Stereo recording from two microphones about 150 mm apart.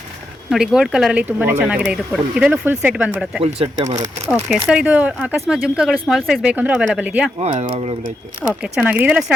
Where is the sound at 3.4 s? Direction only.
45° right (ahead or behind).